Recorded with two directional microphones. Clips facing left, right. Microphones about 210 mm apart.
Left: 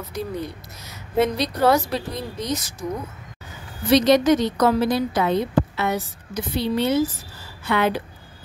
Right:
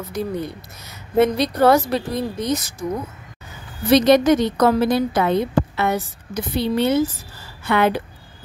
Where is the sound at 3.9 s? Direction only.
55° right (ahead or behind).